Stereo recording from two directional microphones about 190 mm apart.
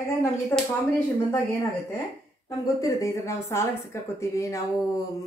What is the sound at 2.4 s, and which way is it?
A woman's voice, 15° left (ahead or behind).